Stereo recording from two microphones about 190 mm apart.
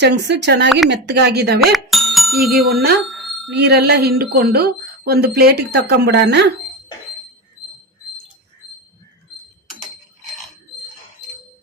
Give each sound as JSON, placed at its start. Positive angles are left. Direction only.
{"t": 0.0, "sound": "speech", "side_deg": -65}
{"t": 1.6, "sound": "speech", "side_deg": 0}
{"t": 3.1, "sound": "bicycle bell", "side_deg": 0}
{"t": 3.5, "sound": "speech", "side_deg": -60}